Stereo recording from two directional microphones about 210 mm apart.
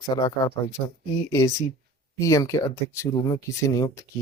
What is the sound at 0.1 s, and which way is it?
Speech, 20° left (ahead or behind).